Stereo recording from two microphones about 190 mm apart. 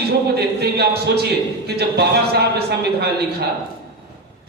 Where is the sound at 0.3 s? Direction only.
60° right (ahead or behind).